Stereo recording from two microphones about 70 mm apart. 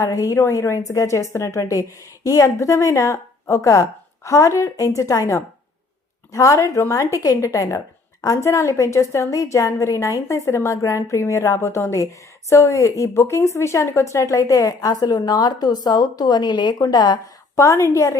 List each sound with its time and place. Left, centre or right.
0.0 s a woman's voice: left
17.6 s a woman's voice: left